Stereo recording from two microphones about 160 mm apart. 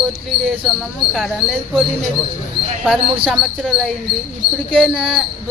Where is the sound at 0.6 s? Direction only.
Centre (ahead or behind).